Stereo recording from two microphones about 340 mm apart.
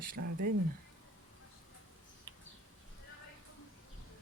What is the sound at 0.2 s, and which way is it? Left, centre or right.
Speech, right.